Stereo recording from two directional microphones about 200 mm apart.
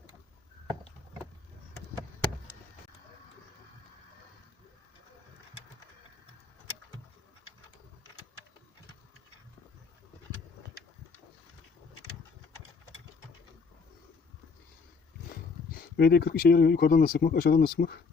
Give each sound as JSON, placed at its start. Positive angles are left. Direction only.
{"t": 16.0, "sound": "speech", "side_deg": 55}